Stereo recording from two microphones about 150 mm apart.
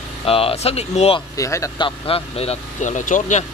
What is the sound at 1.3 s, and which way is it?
Speech, 20° left (ahead or behind).